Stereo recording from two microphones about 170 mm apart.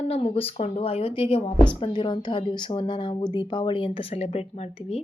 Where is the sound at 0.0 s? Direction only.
40° left (ahead or behind).